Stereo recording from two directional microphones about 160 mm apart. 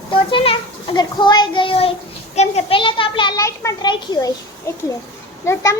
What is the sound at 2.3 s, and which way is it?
A child's voice, 40° left (ahead or behind).